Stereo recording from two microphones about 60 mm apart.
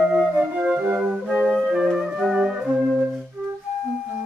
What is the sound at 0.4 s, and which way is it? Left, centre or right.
Music, right.